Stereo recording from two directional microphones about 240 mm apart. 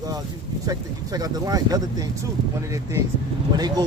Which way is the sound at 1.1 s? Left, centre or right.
Centre.